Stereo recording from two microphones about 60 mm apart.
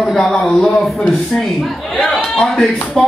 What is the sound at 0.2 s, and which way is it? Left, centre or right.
A man's voice, centre.